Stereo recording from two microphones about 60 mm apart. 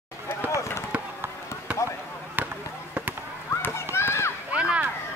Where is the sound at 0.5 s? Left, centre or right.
Left.